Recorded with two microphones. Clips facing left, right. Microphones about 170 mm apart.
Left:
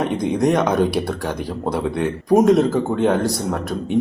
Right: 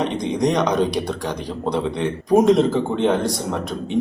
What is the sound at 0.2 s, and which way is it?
Speech, 5° left (ahead or behind).